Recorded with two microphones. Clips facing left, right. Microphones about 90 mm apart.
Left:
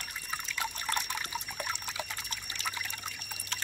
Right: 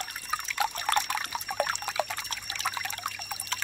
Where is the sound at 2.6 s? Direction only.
90° right.